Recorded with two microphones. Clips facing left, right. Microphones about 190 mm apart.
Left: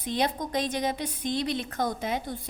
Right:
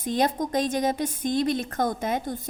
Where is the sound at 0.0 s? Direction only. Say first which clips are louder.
Right 4 dB; 45° right (ahead or behind).